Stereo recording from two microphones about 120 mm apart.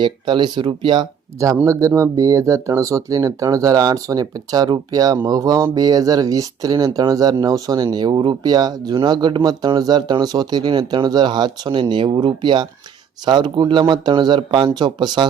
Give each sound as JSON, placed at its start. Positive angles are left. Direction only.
{"t": 0.0, "sound": "speech", "side_deg": -40}
{"t": 1.6, "sound": "speech", "side_deg": -25}